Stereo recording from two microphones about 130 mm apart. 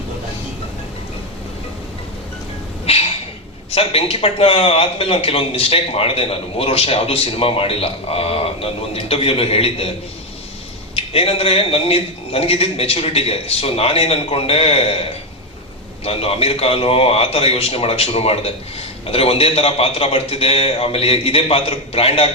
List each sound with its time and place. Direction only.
2.8 s a sound: 50° left (ahead or behind)
3.7 s a man's voice: 50° left (ahead or behind)
10.9 s a man's voice: 50° left (ahead or behind)